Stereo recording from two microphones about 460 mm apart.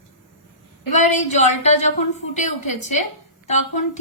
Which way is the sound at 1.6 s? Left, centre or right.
Centre.